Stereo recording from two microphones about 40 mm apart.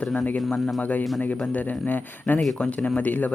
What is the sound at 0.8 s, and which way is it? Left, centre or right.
Speech, left.